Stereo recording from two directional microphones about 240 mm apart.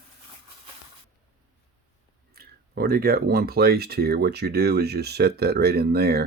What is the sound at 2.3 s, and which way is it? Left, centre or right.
Speech, right.